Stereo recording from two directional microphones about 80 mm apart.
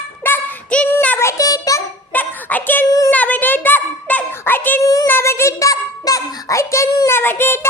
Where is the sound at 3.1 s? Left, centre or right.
Centre.